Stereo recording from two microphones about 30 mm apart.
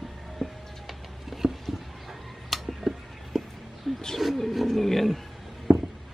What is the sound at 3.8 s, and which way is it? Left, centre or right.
Bird, centre.